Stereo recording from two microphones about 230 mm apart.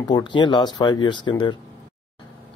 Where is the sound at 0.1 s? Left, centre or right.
Centre.